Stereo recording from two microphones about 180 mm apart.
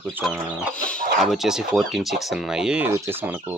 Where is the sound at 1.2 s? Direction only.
Centre (ahead or behind).